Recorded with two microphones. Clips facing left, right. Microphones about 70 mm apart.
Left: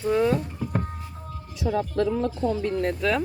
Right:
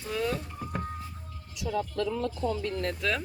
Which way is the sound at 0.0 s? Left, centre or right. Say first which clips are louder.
Left 9 dB; left.